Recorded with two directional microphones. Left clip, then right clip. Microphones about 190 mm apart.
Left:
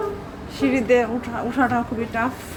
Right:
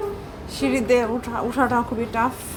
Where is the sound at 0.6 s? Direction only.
10° right (ahead or behind).